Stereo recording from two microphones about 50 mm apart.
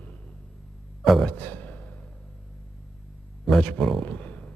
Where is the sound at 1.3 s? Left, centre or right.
Left.